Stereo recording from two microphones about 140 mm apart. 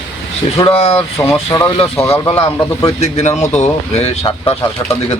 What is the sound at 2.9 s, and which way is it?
Speech, 55° left (ahead or behind).